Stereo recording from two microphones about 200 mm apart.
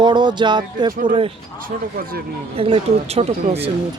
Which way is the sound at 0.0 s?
20° right (ahead or behind).